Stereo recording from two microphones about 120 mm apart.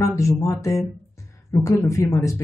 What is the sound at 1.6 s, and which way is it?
Speech, 25° left (ahead or behind).